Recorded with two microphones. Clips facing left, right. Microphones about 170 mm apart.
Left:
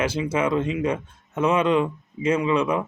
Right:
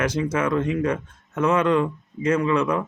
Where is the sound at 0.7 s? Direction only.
10° left (ahead or behind).